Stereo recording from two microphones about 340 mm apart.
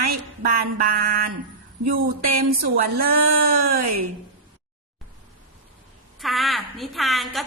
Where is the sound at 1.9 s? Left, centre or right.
Right.